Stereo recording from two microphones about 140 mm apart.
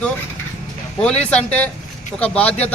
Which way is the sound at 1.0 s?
5° left (ahead or behind).